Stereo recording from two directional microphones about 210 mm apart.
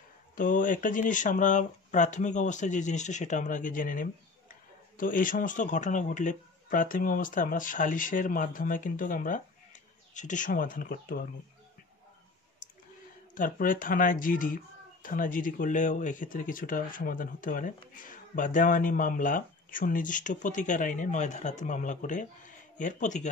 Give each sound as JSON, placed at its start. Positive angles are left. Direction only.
{"t": 0.4, "sound": "speech", "side_deg": 40}
{"t": 13.3, "sound": "speech", "side_deg": 40}